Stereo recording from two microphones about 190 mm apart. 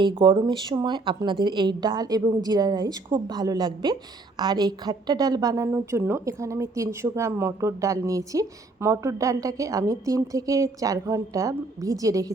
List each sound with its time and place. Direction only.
0.0 s a woman's voice: 25° right (ahead or behind)